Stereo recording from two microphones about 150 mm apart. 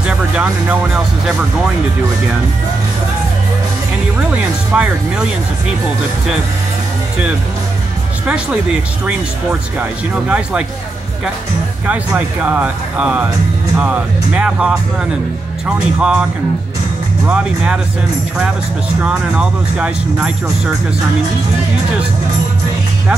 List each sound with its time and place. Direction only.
0.0 s music: 5° right (ahead or behind)
4.7 s speech: 10° right (ahead or behind)
9.8 s speech: 10° right (ahead or behind)
11.8 s speech: 10° right (ahead or behind)
14.3 s speech: 5° right (ahead or behind)
16.0 s speech: 5° right (ahead or behind)
17.3 s speech: 5° right (ahead or behind)
19.0 s speech: 5° right (ahead or behind)